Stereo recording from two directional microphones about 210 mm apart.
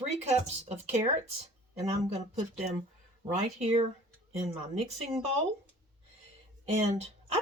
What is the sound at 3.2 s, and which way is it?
Speech, 30° right (ahead or behind).